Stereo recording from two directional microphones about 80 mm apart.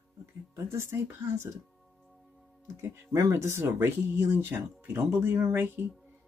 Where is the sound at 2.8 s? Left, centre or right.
Right.